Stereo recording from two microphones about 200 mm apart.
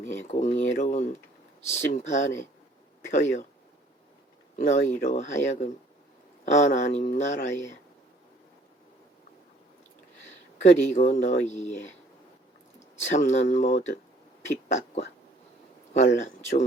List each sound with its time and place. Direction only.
0.3 s speech: 35° left (ahead or behind)
4.5 s speech: 40° left (ahead or behind)
10.6 s speech: 35° left (ahead or behind)
13.1 s speech: 35° left (ahead or behind)